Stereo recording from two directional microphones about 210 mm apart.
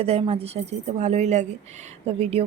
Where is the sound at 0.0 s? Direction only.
30° right (ahead or behind).